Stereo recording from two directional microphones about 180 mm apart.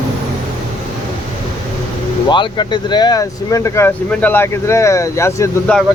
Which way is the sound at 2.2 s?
25° left (ahead or behind).